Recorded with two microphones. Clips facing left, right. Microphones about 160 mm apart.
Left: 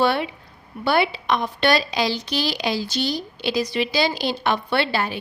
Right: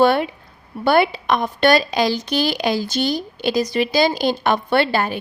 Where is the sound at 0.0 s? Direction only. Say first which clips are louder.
Right 5 dB; 50° right (ahead or behind).